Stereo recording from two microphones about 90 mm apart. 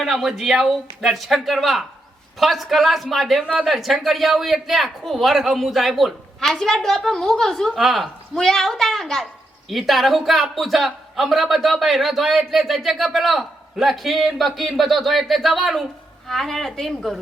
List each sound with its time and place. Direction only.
0.0 s a man's voice: 5° right (ahead or behind)
3.4 s speech: 10° right (ahead or behind)
3.7 s a man's voice: centre (ahead or behind)